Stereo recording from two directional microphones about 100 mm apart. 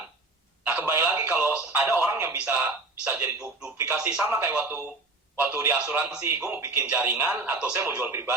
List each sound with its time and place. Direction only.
0.6 s telephone: 20° right (ahead or behind)
2.0 s a sound: 20° right (ahead or behind)
3.9 s speech: 15° right (ahead or behind)